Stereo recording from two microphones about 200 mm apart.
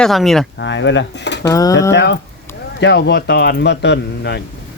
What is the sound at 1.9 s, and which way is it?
Speech, 60° left (ahead or behind).